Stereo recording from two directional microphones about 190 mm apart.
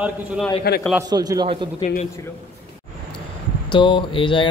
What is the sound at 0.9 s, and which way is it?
Speech, 20° right (ahead or behind).